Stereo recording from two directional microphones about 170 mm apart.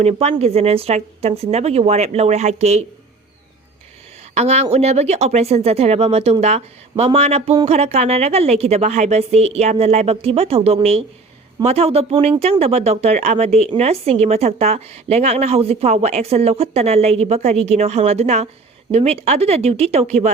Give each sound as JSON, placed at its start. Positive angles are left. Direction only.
{"t": 0.0, "sound": "speech", "side_deg": -40}
{"t": 4.4, "sound": "speech", "side_deg": -40}